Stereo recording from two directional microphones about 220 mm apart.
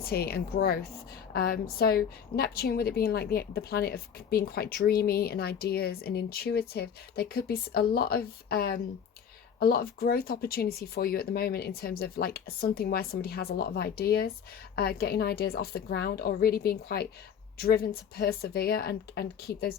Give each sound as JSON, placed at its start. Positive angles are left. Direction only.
{"t": 0.0, "sound": "a woman's voice", "side_deg": 45}